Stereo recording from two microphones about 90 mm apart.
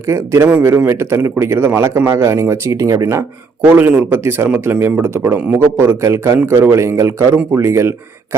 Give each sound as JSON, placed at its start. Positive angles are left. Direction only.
{"t": 0.1, "sound": "speech", "side_deg": -30}
{"t": 3.6, "sound": "speech", "side_deg": -20}